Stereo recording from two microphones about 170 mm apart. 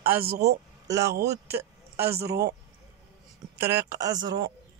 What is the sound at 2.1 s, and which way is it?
Speech, 75° right (ahead or behind).